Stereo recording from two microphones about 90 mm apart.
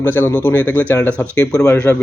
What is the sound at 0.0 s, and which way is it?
Speech, 25° left (ahead or behind).